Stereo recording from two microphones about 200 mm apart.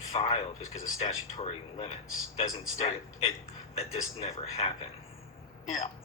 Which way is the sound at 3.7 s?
30° left (ahead or behind).